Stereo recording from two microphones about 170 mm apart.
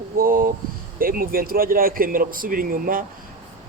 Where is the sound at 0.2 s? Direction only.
55° right (ahead or behind).